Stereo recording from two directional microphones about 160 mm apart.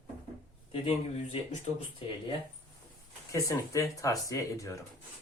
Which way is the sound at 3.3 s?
20° left (ahead or behind).